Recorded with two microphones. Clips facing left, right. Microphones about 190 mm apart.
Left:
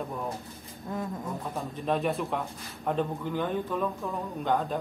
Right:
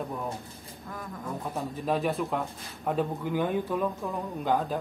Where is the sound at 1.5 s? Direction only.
5° right (ahead or behind).